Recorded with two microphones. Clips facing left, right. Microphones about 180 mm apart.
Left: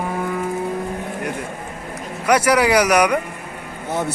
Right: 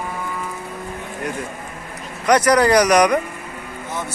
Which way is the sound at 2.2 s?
10° left (ahead or behind).